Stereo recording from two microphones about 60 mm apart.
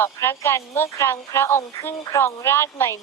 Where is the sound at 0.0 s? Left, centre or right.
Left.